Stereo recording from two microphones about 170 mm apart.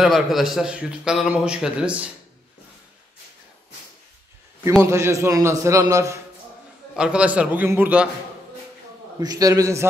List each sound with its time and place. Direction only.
0.0 s a man's voice: centre (ahead or behind)
4.8 s a man's voice: 15° right (ahead or behind)
7.0 s a man's voice: 5° right (ahead or behind)
9.2 s a man's voice: 20° right (ahead or behind)